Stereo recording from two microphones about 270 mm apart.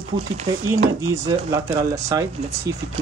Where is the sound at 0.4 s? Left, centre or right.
Centre.